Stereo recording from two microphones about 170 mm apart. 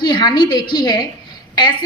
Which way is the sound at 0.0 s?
25° left (ahead or behind).